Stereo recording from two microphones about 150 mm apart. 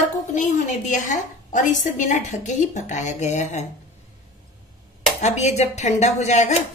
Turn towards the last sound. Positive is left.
turn(degrees=50)  # may be behind; listen again after turning